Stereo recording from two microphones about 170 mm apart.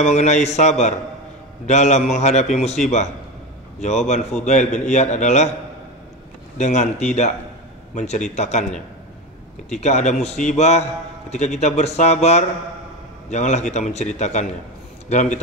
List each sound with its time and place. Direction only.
0.0 s a man's voice: 40° left (ahead or behind)
4.1 s a man's voice: 40° left (ahead or behind)
6.6 s a man's voice: 40° left (ahead or behind)
9.7 s a man's voice: 40° left (ahead or behind)